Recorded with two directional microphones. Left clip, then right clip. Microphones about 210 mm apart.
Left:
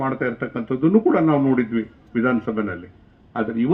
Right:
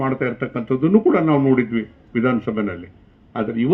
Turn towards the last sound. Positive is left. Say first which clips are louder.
# right 1 dB
turn(degrees=-55)  # may be behind; listen again after turning